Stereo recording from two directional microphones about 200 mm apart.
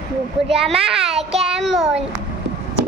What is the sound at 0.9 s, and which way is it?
Child singing, 30° right (ahead or behind).